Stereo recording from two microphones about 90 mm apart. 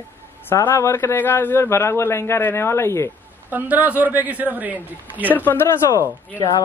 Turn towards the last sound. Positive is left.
turn(degrees=45)  # may be behind; listen again after turning